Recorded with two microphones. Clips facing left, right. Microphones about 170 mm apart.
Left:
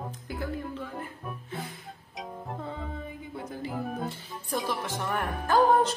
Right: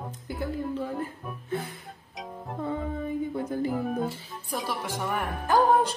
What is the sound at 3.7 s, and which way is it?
Speech, centre (ahead or behind).